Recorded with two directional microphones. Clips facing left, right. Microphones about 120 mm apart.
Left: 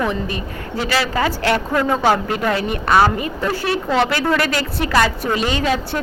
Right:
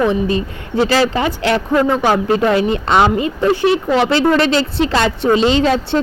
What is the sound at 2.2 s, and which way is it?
Speech, 25° right (ahead or behind).